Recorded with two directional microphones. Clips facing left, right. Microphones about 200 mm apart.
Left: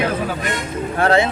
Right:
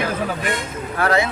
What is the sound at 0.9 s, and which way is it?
Speech, 30° left (ahead or behind).